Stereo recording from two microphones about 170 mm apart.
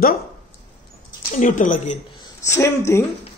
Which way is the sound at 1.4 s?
50° left (ahead or behind).